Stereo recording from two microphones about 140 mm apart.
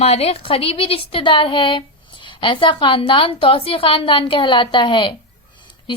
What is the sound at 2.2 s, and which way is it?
A woman's voice, 35° left (ahead or behind).